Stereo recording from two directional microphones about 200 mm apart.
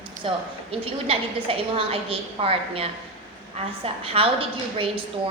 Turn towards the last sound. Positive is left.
turn(degrees=-25)  # may be behind; listen again after turning